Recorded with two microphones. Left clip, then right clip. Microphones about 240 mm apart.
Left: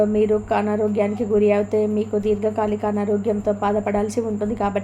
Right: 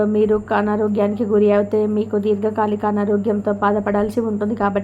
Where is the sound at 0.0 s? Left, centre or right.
Centre.